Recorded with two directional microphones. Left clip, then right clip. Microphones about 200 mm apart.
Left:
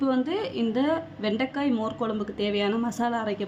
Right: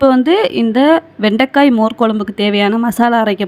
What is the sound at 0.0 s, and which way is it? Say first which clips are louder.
A woman's voice: right 16 dB; 40° right (ahead or behind).